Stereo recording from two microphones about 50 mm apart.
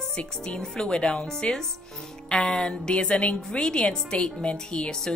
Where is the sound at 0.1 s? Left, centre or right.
Left.